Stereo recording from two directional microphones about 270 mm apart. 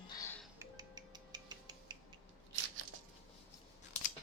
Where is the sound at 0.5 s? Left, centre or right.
Centre.